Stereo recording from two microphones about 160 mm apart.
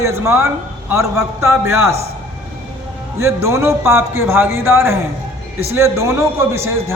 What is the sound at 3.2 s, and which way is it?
A man's voice, 15° right (ahead or behind).